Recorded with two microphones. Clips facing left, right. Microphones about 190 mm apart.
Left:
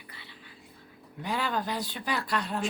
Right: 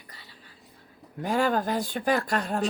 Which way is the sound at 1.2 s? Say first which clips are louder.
Right 6 dB; 45° right (ahead or behind).